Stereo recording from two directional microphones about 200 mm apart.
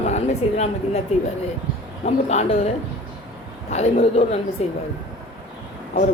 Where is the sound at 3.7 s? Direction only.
35° left (ahead or behind).